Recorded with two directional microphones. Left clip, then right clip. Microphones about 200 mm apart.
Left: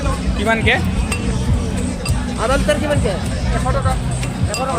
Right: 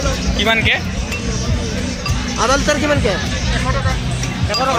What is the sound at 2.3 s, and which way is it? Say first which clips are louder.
Speech: right 2 dB; 50° right (ahead or behind).